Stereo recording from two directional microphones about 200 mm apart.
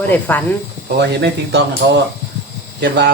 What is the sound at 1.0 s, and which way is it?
Speech, 55° right (ahead or behind).